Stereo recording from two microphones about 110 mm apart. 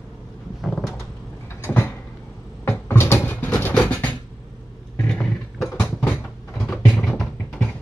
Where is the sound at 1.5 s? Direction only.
20° left (ahead or behind).